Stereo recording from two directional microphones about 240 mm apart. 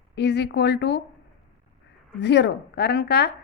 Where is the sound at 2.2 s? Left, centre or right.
Left.